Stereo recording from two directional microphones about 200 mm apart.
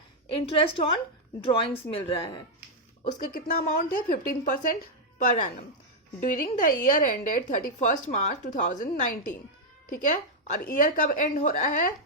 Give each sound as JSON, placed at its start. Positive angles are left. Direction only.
{"t": 0.3, "sound": "a woman's voice", "side_deg": 25}
{"t": 3.0, "sound": "a woman's voice", "side_deg": 40}